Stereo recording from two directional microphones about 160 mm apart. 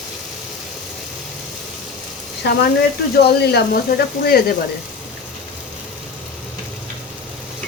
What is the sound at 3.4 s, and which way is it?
Speech, 85° left.